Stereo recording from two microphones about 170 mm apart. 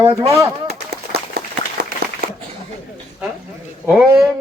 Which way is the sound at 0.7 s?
70° right (ahead or behind).